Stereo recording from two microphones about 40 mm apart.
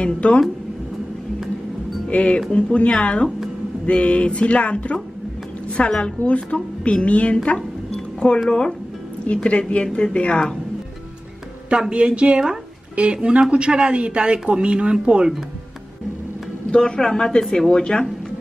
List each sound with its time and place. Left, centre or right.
0.0 s a woman's voice: left
2.0 s a woman's voice: left
7.9 s a sound: left
8.5 s a woman's voice: left
11.7 s speech: right
16.7 s a woman's voice: left